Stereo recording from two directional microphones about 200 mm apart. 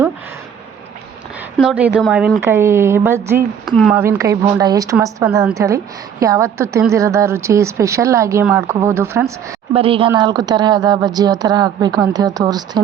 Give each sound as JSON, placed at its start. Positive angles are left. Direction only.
{"t": 1.5, "sound": "a woman's voice", "side_deg": -5}
{"t": 9.7, "sound": "a woman's voice", "side_deg": -30}